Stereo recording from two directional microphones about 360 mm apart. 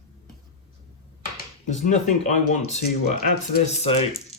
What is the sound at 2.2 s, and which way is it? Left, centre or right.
Speech, centre.